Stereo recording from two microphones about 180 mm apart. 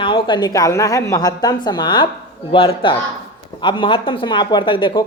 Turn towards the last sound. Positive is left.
turn(degrees=25)  # may be behind; listen again after turning